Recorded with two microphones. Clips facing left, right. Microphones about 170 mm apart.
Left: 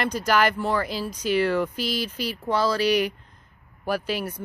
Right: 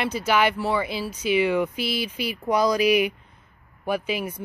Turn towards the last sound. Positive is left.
turn(degrees=-5)  # may be behind; listen again after turning